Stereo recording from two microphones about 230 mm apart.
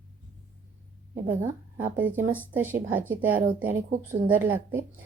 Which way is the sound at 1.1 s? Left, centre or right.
Centre.